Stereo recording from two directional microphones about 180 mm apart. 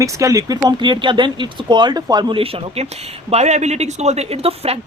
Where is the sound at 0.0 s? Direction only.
15° right (ahead or behind).